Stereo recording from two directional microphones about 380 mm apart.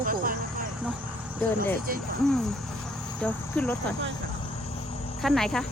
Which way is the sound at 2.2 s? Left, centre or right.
Centre.